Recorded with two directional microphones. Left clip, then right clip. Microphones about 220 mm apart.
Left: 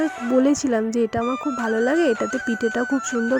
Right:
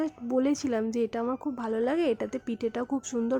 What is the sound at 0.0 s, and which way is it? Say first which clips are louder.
Speech: left 9 dB; 25° left (ahead or behind).